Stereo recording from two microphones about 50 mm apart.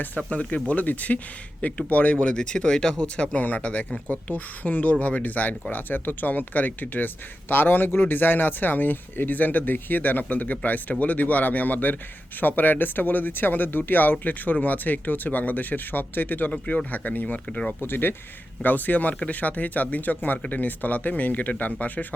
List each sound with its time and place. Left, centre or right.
0.3 s a man's voice: left
17.8 s a man's voice: left